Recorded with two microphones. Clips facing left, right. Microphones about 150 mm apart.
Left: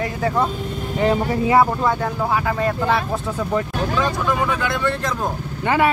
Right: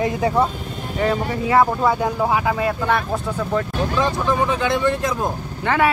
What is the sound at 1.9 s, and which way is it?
Speech, 15° right (ahead or behind).